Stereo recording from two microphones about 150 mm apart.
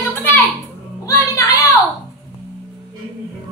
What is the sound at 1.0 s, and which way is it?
Music, 20° left (ahead or behind).